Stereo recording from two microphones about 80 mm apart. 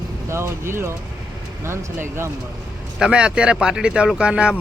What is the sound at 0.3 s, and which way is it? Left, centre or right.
Speech, right.